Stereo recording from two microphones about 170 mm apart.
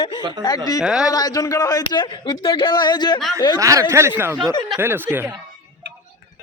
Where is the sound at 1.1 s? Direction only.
20° left (ahead or behind).